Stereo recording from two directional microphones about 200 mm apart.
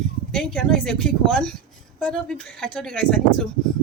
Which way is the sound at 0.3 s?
5° left (ahead or behind).